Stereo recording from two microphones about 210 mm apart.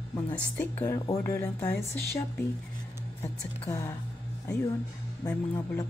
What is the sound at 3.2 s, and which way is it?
Speech, 15° left (ahead or behind).